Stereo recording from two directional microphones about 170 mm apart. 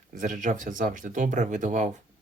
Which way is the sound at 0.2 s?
50° right (ahead or behind).